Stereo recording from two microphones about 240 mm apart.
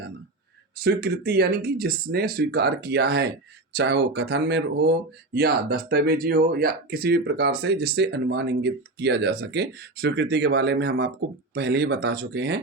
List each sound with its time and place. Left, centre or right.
0.8 s speech: right